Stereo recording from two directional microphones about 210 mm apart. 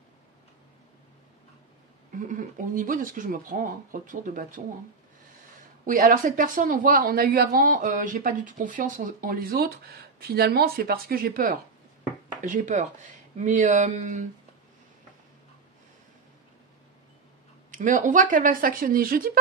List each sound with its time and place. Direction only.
2.1 s speech: 40° right (ahead or behind)
5.9 s speech: 40° right (ahead or behind)
17.6 s speech: 40° right (ahead or behind)